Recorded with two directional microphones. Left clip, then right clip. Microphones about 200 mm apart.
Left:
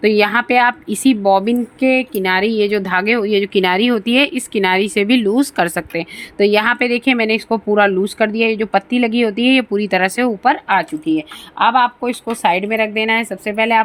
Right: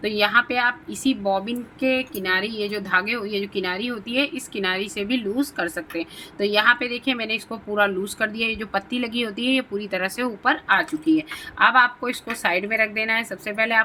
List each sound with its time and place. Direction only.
0.0 s a woman's voice: 40° left (ahead or behind)